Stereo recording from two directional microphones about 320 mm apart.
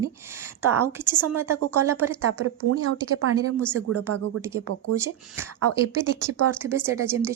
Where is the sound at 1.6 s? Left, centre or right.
Right.